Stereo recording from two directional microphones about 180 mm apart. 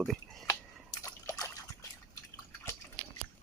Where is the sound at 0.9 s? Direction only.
20° left (ahead or behind).